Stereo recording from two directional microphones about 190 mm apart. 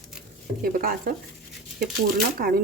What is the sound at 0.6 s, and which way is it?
Speech, 50° right (ahead or behind).